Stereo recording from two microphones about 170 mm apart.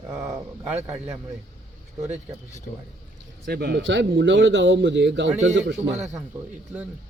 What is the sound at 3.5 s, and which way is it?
A man's voice, 70° right (ahead or behind).